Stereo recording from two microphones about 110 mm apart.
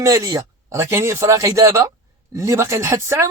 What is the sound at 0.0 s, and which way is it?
A man's voice, 30° right (ahead or behind).